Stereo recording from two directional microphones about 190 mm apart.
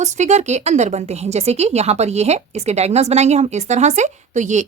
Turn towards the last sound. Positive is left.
turn(degrees=-40)  # may be behind; listen again after turning